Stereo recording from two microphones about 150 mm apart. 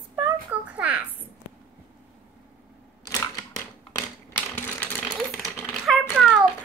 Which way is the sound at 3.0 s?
20° left (ahead or behind).